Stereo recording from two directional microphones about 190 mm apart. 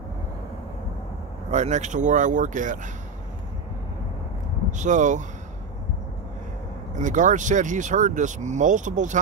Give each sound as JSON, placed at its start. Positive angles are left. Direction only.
{"t": 1.5, "sound": "speech", "side_deg": -40}
{"t": 4.6, "sound": "speech", "side_deg": -40}
{"t": 7.0, "sound": "speech", "side_deg": -40}